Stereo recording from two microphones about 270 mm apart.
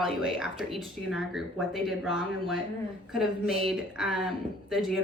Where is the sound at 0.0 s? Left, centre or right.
Centre.